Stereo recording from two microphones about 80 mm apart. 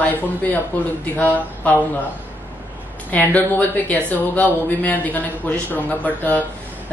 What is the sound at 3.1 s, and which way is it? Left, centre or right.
A man's voice, left.